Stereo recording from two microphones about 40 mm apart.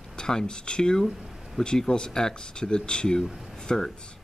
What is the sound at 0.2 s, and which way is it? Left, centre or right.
Speech, centre.